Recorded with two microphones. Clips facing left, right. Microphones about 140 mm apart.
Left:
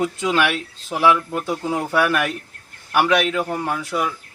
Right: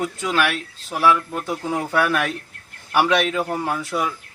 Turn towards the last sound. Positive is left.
turn(degrees=0)  # may be behind; listen again after turning